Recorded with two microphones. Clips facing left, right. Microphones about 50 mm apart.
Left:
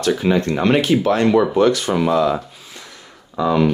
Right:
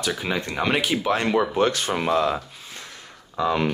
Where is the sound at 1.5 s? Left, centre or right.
Right.